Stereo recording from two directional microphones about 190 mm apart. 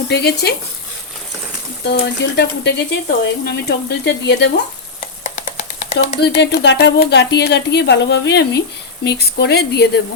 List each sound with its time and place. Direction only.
0.1 s speech: 60° left (ahead or behind)
1.8 s speech: 60° left (ahead or behind)
5.2 s a sound: 35° left (ahead or behind)
6.2 s speech: 65° left (ahead or behind)